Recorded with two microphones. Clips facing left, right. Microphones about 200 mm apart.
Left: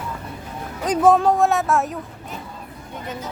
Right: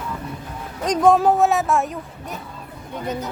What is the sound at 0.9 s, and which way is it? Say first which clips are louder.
Speech: even; centre (ahead or behind).